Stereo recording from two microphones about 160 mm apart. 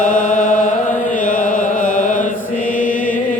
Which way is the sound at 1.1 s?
55° left (ahead or behind).